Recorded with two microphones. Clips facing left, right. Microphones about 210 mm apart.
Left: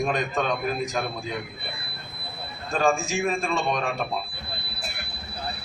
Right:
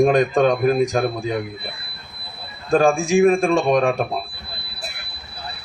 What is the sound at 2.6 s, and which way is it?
A man's voice, 55° right (ahead or behind).